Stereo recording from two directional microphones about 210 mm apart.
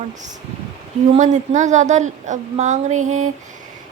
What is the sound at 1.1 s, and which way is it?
A woman's voice, 35° right (ahead or behind).